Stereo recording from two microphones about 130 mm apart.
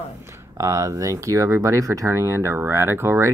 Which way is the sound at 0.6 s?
25° right (ahead or behind).